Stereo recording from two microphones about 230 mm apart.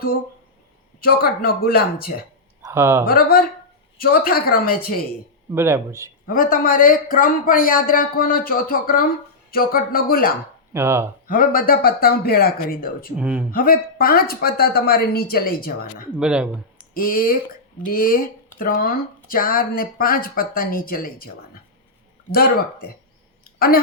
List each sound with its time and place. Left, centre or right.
1.0 s speech: left
2.6 s speech: centre
3.1 s speech: left
5.5 s speech: centre
6.2 s speech: left
10.8 s speech: centre
11.3 s speech: left
13.1 s speech: centre
13.5 s speech: left
16.1 s speech: centre
16.9 s speech: left
23.4 s a sound: left